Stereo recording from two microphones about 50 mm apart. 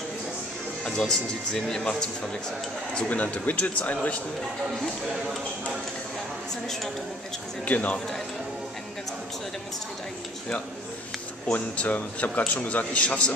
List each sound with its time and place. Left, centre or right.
0.8 s speech: centre
3.1 s a man's voice: left
7.6 s a man's voice: left
11.5 s a man's voice: left